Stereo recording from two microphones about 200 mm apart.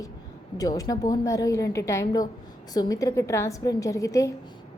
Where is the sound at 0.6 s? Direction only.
15° left (ahead or behind).